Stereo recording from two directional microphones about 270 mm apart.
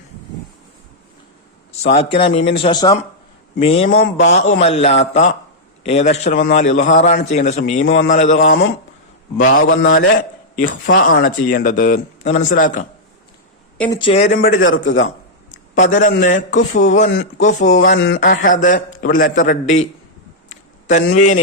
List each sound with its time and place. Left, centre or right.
1.7 s a man's voice: left
7.8 s a man's voice: left
8.0 s a man's voice: left
9.4 s a man's voice: left
13.7 s speech: centre
14.0 s a man's voice: left
14.6 s a man's voice: left
15.8 s a man's voice: left
17.9 s a man's voice: left
18.3 s a man's voice: left
20.5 s a sound: left